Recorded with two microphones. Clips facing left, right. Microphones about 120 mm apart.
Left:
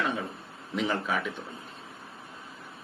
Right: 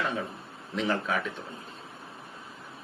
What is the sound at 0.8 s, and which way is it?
Speech, 5° left (ahead or behind).